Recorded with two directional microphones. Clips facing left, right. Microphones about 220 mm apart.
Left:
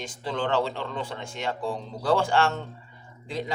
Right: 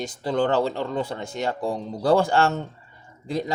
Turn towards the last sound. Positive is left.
turn(degrees=-40)  # may be behind; listen again after turning